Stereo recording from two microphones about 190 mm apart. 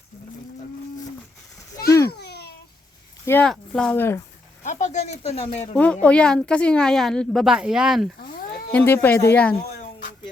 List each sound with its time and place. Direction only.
2.0 s babbling: 60° left (ahead or behind)
3.2 s speech: 5° left (ahead or behind)
4.6 s a sound: 40° left (ahead or behind)
5.7 s a woman's voice: 5° left (ahead or behind)
8.7 s speech: 10° left (ahead or behind)